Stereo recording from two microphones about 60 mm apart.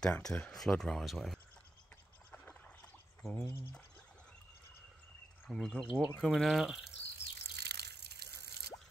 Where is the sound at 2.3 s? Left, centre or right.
Left.